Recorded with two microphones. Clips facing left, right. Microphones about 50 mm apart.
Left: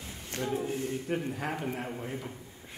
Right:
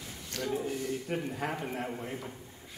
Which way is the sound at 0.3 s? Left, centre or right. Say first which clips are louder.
Left 1 dB; left.